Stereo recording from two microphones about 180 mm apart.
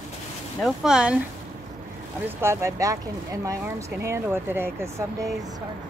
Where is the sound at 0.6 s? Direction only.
Centre (ahead or behind).